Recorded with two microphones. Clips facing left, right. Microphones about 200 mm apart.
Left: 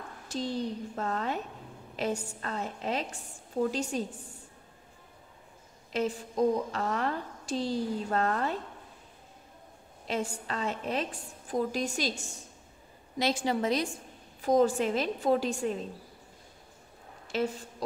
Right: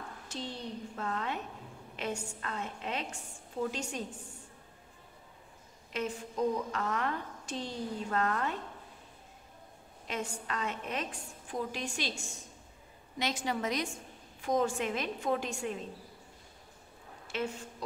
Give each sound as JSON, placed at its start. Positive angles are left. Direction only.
{"t": 0.3, "sound": "a woman's voice", "side_deg": 40}
{"t": 5.9, "sound": "a woman's voice", "side_deg": 35}
{"t": 10.0, "sound": "a woman's voice", "side_deg": 30}
{"t": 13.2, "sound": "a woman's voice", "side_deg": 30}
{"t": 17.3, "sound": "a woman's voice", "side_deg": 35}